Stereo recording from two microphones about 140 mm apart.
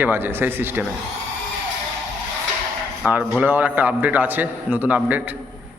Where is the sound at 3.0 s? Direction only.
10° right (ahead or behind).